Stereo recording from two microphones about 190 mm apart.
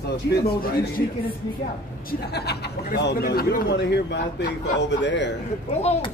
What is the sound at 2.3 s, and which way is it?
Speech, 60° left (ahead or behind).